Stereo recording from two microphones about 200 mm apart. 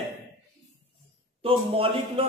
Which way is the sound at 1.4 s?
30° right (ahead or behind).